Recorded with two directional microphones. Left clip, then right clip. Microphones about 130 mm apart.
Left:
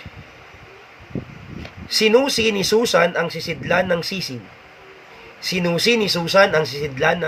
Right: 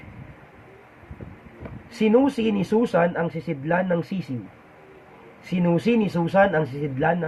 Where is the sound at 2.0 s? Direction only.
20° left (ahead or behind).